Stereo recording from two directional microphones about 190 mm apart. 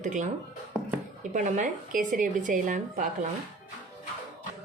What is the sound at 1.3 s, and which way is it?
A woman's voice, 40° right (ahead or behind).